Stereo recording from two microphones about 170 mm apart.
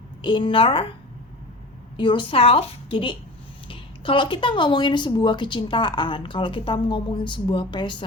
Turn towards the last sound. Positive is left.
turn(degrees=25)  # may be behind; listen again after turning